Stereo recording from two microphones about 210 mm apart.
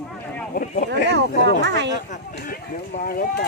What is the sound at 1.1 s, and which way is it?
Speech, 55° right (ahead or behind).